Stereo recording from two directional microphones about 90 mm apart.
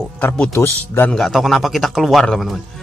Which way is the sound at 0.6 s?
25° left (ahead or behind).